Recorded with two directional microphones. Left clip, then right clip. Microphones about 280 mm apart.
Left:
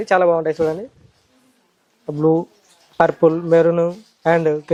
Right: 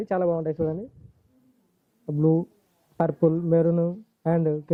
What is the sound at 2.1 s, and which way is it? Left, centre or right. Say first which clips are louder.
Speech: left 7 dB; centre.